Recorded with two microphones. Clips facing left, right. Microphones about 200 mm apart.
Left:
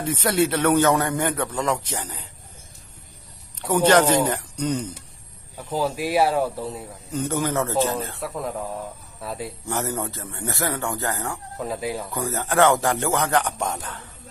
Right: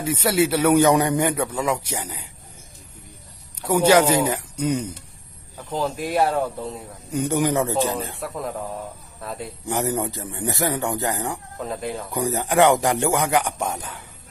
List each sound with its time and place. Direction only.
0.0 s a man's voice: 10° right (ahead or behind)
3.6 s a man's voice: 10° right (ahead or behind)
5.5 s speech: 5° left (ahead or behind)
7.1 s a man's voice: 15° right (ahead or behind)
8.2 s speech: centre (ahead or behind)
9.6 s a man's voice: 15° right (ahead or behind)
11.6 s speech: 5° left (ahead or behind)
12.1 s a man's voice: 15° right (ahead or behind)